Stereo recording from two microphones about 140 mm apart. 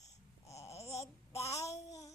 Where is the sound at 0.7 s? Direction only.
50° left (ahead or behind).